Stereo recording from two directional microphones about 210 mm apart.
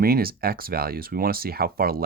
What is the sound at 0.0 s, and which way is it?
Speech, 45° right (ahead or behind).